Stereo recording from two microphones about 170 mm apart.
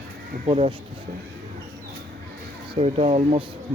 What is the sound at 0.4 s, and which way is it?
Speech, 35° right (ahead or behind).